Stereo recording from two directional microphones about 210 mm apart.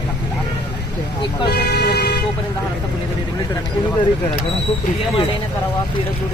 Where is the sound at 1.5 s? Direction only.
50° left (ahead or behind).